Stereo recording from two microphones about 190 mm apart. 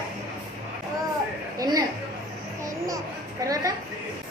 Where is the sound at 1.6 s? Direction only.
20° right (ahead or behind).